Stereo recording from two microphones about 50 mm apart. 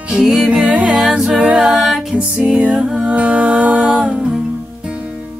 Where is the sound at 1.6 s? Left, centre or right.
Centre.